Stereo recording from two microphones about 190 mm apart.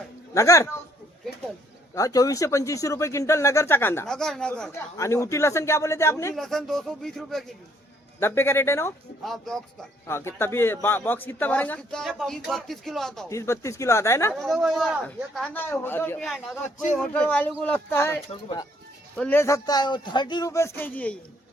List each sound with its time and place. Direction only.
0.3 s speech: 15° left (ahead or behind)
2.0 s speech: 20° left (ahead or behind)
4.9 s speech: 15° left (ahead or behind)
6.3 s a man's voice: centre (ahead or behind)
8.2 s speech: 15° left (ahead or behind)
9.2 s a man's voice: centre (ahead or behind)
10.1 s a man's voice: 15° left (ahead or behind)
13.3 s speech: 15° left (ahead or behind)
14.3 s a man's voice: centre (ahead or behind)
18.4 s speech: 20° left (ahead or behind)
19.1 s speech: 10° left (ahead or behind)